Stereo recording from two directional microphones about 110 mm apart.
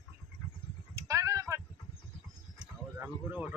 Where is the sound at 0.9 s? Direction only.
30° right (ahead or behind).